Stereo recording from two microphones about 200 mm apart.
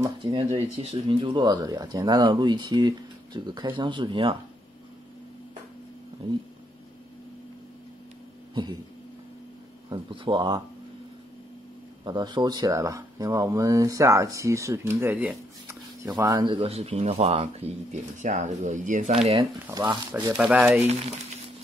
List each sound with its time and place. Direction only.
0.0 s speech: 25° right (ahead or behind)
9.8 s speech: 20° right (ahead or behind)
12.0 s speech: 20° right (ahead or behind); by 19.1 s 40° right (ahead or behind)
19.6 s speech: 15° right (ahead or behind)
20.3 s speech: 5° right (ahead or behind)